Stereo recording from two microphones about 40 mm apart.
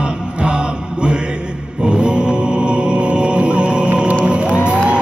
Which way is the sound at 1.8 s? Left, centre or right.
Right.